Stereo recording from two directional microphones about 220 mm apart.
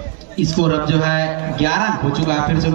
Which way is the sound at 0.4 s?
50° left (ahead or behind).